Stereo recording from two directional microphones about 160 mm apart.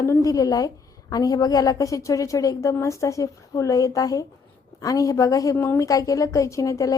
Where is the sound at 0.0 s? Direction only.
20° left (ahead or behind).